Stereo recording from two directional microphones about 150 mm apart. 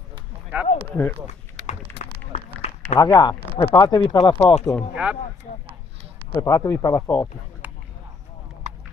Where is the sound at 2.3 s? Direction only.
50° left (ahead or behind).